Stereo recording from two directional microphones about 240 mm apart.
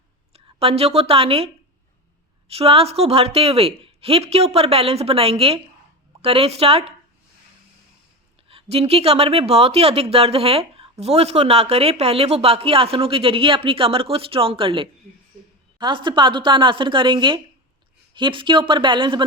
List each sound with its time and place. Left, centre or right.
0.3 s a woman's voice: right
2.5 s speech: right
8.4 s speech: right